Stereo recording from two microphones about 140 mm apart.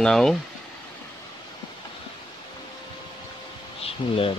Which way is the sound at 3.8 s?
40° left (ahead or behind).